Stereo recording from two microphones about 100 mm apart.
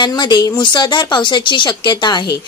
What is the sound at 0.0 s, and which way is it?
Speech, 45° left (ahead or behind).